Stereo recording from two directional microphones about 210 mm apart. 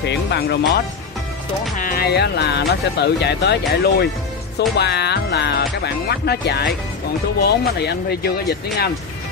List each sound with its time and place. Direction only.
0.0 s speech: 55° left (ahead or behind)